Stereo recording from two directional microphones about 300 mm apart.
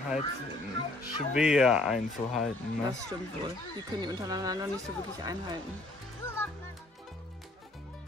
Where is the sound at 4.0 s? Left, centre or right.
Centre.